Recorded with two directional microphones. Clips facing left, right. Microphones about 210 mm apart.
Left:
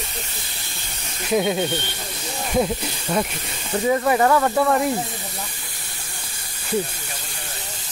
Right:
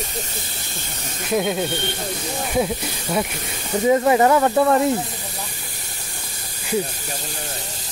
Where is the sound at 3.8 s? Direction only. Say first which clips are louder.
Right 3 dB; 20° right (ahead or behind).